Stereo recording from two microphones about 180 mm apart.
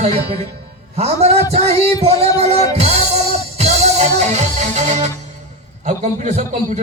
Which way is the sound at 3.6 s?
40° right (ahead or behind).